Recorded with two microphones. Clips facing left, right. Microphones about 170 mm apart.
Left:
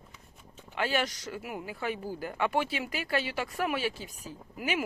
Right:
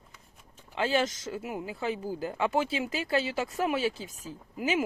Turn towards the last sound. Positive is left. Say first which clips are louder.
# right 3 dB
turn(degrees=-25)  # may be behind; listen again after turning